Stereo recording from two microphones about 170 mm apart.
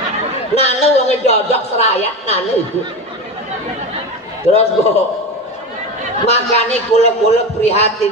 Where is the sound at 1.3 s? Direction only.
40° left (ahead or behind).